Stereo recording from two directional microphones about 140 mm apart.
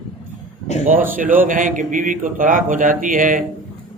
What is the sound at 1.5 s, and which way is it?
A man's voice, 70° right (ahead or behind).